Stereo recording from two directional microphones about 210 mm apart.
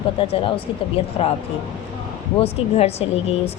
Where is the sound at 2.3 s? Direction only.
30° left (ahead or behind).